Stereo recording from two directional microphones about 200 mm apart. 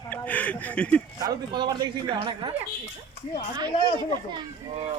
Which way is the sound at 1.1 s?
20° right (ahead or behind).